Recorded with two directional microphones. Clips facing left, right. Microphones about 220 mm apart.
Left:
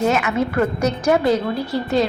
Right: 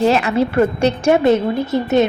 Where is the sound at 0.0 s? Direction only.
35° right (ahead or behind).